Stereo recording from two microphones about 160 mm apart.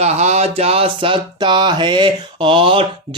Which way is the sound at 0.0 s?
40° right (ahead or behind).